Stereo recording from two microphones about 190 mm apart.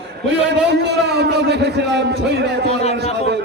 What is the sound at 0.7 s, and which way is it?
A man's voice, 60° right (ahead or behind).